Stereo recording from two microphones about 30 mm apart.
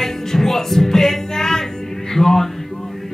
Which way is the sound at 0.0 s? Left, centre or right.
Centre.